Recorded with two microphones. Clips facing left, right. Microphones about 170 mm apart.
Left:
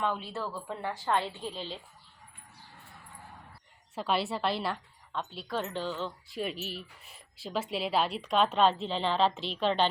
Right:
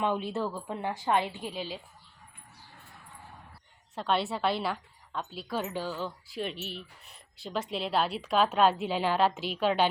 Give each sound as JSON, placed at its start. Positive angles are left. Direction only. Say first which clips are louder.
{"t": 0.0, "sound": "a woman's voice", "louder": "right 3 dB", "side_deg": -15}
{"t": 3.9, "sound": "a woman's voice", "louder": "right 1 dB", "side_deg": 0}